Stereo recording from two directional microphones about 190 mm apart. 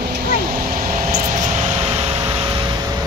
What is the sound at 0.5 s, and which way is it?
Vehicle, 45° right (ahead or behind).